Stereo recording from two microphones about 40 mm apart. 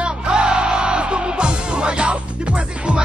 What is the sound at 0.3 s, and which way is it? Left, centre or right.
Music, right.